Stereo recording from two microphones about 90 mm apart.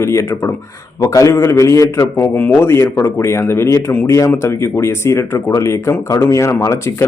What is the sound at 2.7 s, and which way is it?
A man's voice, 30° left (ahead or behind).